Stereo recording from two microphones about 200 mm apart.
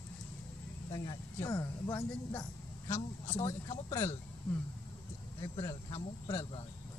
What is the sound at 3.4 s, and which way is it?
Speech, 15° left (ahead or behind).